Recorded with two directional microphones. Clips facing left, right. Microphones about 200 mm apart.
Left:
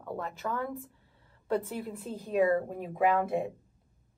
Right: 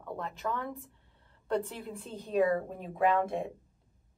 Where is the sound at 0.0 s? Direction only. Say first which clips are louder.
Left 1 dB; 5° left (ahead or behind).